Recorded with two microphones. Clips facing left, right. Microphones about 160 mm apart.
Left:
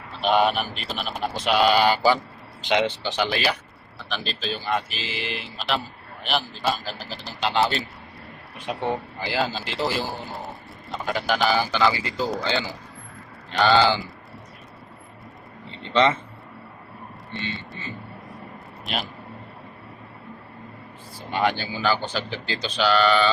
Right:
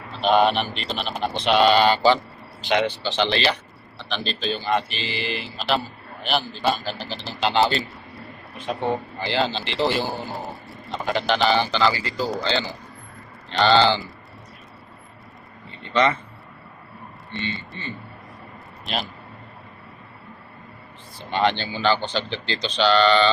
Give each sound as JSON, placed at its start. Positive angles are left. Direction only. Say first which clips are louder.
{"t": 0.2, "sound": "speech", "louder": "right 2 dB", "side_deg": 10}
{"t": 8.7, "sound": "speech", "louder": "right 2 dB", "side_deg": 10}
{"t": 15.8, "sound": "a sound", "louder": "left 1 dB", "side_deg": 25}
{"t": 17.3, "sound": "speech", "louder": "right 2 dB", "side_deg": 0}
{"t": 21.2, "sound": "speech", "louder": "right 2 dB", "side_deg": 10}